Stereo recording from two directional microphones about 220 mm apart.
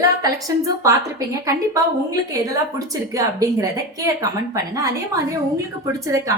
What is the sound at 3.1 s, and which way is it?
A woman's voice, 15° right (ahead or behind).